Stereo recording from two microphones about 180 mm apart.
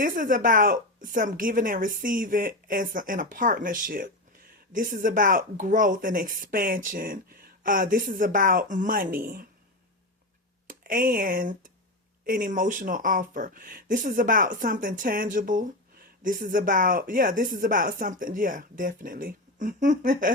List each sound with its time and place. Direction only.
0.0 s speech: 50° right (ahead or behind)
10.7 s speech: 50° right (ahead or behind)